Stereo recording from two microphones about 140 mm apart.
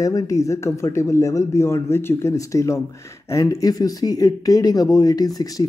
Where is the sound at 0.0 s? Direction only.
25° left (ahead or behind).